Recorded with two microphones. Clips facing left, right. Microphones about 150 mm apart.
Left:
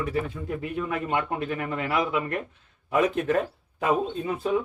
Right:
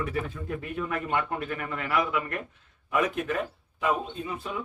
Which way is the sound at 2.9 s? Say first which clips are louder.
Left 4 dB; 35° left (ahead or behind).